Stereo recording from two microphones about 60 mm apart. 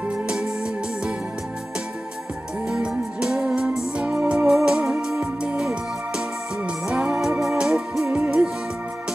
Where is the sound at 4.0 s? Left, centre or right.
Right.